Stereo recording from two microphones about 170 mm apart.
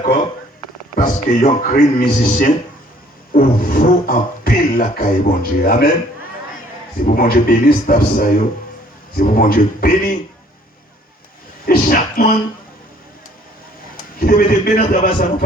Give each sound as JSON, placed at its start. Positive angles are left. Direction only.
{"t": 1.3, "sound": "beatboxing", "side_deg": 50}
{"t": 2.0, "sound": "a man's voice", "side_deg": 50}
{"t": 3.3, "sound": "beatboxing", "side_deg": 55}
{"t": 7.0, "sound": "beatboxing", "side_deg": 55}
{"t": 9.1, "sound": "a man's voice", "side_deg": 55}
{"t": 11.6, "sound": "a sound", "side_deg": 60}
{"t": 14.2, "sound": "beatboxing", "side_deg": 60}